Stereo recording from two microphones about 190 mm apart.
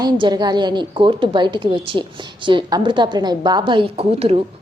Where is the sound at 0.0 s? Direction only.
20° right (ahead or behind).